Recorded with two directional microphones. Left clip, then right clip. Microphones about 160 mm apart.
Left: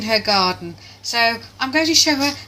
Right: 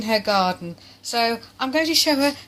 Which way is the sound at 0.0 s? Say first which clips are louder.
Left 3 dB; 50° right (ahead or behind).